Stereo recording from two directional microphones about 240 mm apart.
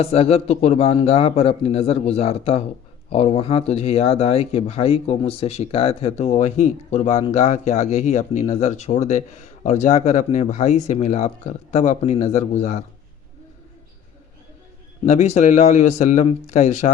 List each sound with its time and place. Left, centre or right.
0.0 s speech: left
15.0 s speech: left